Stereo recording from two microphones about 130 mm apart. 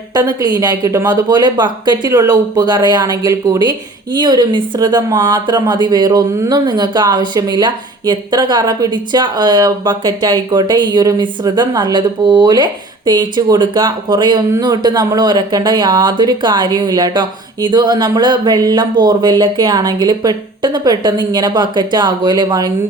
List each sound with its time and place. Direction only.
0.1 s speech: 30° right (ahead or behind)